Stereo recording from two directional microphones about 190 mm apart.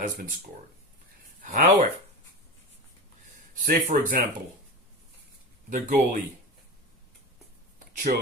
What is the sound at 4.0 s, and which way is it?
Speech, 45° right (ahead or behind).